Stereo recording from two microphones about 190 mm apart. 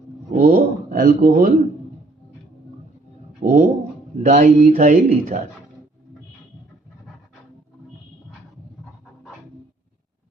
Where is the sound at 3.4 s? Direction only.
45° right (ahead or behind).